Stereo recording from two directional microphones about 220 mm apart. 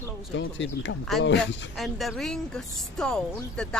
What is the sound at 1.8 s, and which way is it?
Speech, centre (ahead or behind).